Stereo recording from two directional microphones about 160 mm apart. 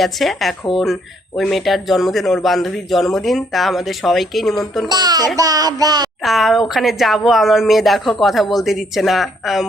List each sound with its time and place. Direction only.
0.0 s a man's voice: centre (ahead or behind)
4.9 s child singing: 25° right (ahead or behind)
6.2 s a man's voice: centre (ahead or behind)